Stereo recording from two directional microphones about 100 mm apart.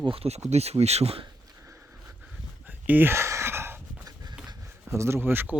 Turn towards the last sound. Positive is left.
turn(degrees=-20)  # may be behind; listen again after turning